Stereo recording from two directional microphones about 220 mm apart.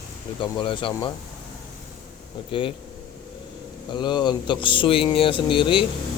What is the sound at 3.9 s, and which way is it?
Speech, 20° left (ahead or behind).